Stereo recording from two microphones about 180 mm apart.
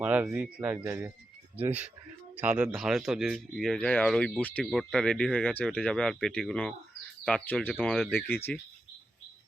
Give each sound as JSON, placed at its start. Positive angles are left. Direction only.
{"t": 0.0, "sound": "speech", "side_deg": -10}